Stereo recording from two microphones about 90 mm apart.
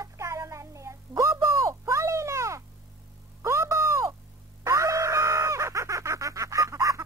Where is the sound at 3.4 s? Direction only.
35° right (ahead or behind).